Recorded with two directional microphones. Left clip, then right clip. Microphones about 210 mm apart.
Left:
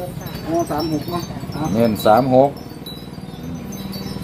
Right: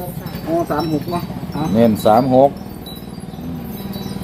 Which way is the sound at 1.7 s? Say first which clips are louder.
Right 1 dB; 5° right (ahead or behind).